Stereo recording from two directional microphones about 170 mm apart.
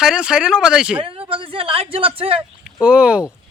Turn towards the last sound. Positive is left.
turn(degrees=-5)  # may be behind; listen again after turning